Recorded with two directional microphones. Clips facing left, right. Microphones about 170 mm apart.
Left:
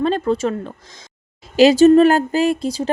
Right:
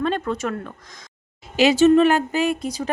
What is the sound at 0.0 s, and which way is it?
Speech, 30° left (ahead or behind).